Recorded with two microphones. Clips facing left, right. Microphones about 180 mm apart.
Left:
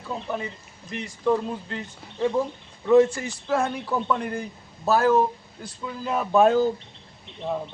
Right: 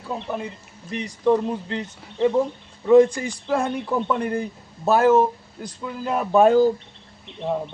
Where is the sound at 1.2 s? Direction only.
20° right (ahead or behind).